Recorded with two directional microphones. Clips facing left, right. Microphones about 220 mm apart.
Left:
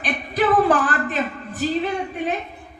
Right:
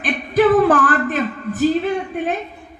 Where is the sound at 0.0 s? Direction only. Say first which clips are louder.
Right 6 dB; 45° right (ahead or behind).